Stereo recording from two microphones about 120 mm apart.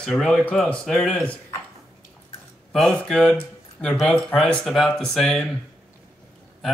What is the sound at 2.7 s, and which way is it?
Speech, 5° left (ahead or behind).